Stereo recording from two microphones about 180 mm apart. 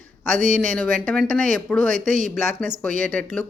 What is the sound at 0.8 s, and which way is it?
Speech, 5° left (ahead or behind).